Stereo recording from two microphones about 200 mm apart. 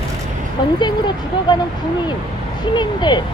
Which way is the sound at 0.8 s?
20° left (ahead or behind).